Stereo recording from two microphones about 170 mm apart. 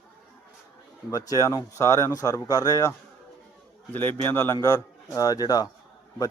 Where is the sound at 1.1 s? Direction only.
20° left (ahead or behind).